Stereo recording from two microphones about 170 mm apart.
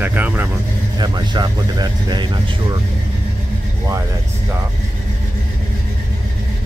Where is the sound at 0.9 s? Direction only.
25° right (ahead or behind).